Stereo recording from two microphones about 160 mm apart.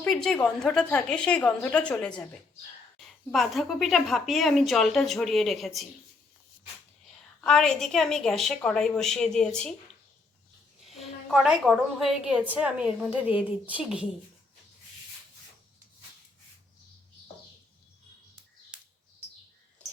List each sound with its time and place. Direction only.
0.0 s speech: 5° left (ahead or behind)
3.3 s speech: centre (ahead or behind)
7.4 s speech: 5° left (ahead or behind)
10.8 s a woman's voice: centre (ahead or behind)
18.7 s bird: 5° right (ahead or behind)